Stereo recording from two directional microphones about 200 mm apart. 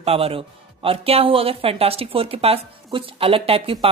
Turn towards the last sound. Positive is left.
turn(degrees=-30)  # may be behind; listen again after turning